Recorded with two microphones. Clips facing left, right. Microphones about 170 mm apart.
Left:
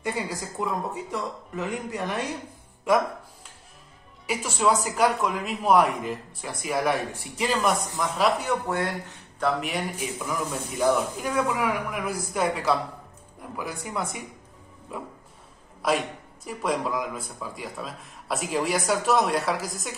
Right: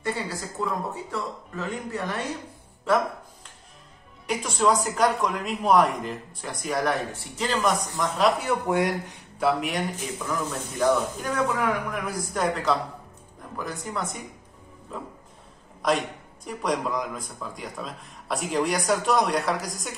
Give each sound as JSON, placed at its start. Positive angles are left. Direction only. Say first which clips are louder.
{"t": 0.0, "sound": "speech", "louder": "even", "side_deg": 15}
{"t": 4.3, "sound": "speech", "louder": "right 1 dB", "side_deg": 5}
{"t": 8.6, "sound": "speech", "louder": "right 4 dB", "side_deg": -15}